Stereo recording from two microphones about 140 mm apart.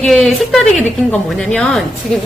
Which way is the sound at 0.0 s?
5° left (ahead or behind).